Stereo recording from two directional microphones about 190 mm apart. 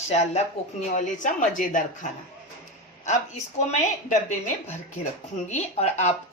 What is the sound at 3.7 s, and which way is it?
A woman's voice, 40° left (ahead or behind).